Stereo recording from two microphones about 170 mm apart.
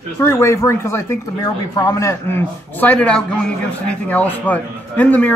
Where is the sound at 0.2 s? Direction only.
15° left (ahead or behind).